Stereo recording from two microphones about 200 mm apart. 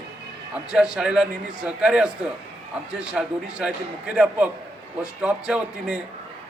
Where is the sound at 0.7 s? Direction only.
5° right (ahead or behind).